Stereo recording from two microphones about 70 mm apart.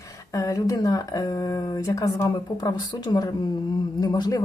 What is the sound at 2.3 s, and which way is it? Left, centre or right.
Speech, left.